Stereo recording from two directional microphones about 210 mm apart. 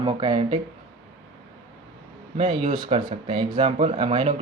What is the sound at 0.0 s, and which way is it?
Speech, 25° right (ahead or behind).